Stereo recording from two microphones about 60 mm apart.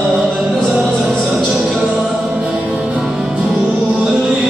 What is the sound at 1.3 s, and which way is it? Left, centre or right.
Music, centre.